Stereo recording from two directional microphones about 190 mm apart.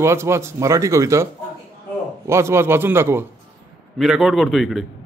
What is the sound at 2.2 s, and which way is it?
Speech, 15° right (ahead or behind).